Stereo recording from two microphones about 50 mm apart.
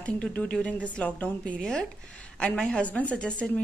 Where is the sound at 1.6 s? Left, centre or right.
Centre.